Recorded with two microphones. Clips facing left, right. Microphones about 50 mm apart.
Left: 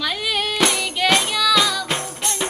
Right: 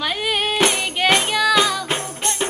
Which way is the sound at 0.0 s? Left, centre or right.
Right.